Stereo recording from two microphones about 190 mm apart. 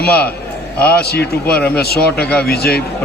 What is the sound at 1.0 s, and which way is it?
Speech, 55° left (ahead or behind).